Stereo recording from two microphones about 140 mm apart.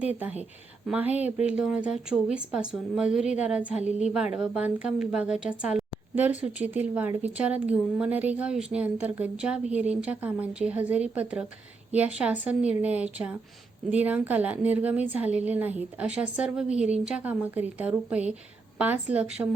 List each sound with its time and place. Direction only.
0.0 s a woman's voice: 10° right (ahead or behind)